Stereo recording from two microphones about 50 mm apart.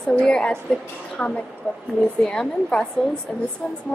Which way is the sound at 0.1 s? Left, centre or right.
Left.